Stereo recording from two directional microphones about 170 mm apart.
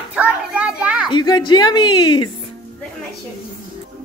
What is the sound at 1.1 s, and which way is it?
A woman's voice, 25° left (ahead or behind).